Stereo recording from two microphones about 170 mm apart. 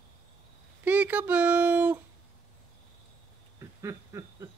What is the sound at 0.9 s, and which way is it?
A child's voice, 10° right (ahead or behind).